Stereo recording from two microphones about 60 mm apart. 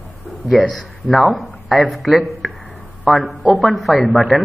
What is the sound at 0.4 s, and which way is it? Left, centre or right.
A man's voice, centre.